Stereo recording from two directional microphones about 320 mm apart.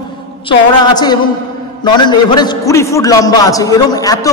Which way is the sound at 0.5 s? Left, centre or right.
Centre.